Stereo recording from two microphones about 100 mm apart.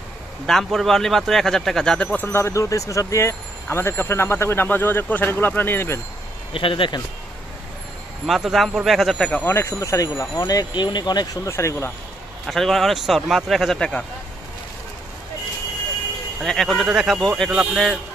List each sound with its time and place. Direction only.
0.5 s speech: 5° left (ahead or behind)
2.3 s speech: 30° left (ahead or behind)
6.5 s speech: 60° left (ahead or behind)
8.3 s speech: centre (ahead or behind)
9.2 s speech: 10° left (ahead or behind)
9.5 s speech: 25° left (ahead or behind); by 11.2 s 45° left (ahead or behind)
11.4 s speech: 25° left (ahead or behind)
12.4 s speech: centre (ahead or behind)
16.4 s speech: 5° left (ahead or behind)
16.8 s speech: 5° right (ahead or behind)
17.2 s speech: 5° left (ahead or behind)